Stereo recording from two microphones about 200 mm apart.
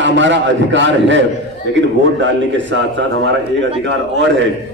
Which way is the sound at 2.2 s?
65° right (ahead or behind).